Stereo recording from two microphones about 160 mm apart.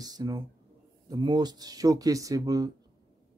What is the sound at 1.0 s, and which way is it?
Speech, 25° right (ahead or behind).